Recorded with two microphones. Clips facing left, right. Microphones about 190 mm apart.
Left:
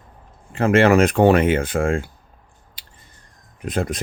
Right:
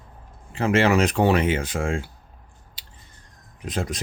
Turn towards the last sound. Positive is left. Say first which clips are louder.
# left 5 dB
turn(degrees=55)  # may be behind; listen again after turning